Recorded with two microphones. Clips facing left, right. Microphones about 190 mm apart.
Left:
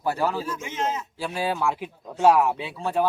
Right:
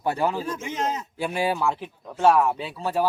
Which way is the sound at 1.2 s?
15° right (ahead or behind).